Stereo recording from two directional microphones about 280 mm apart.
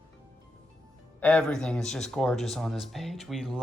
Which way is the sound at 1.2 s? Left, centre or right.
Centre.